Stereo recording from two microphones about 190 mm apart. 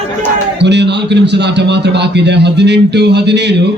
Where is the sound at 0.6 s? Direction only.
65° right (ahead or behind).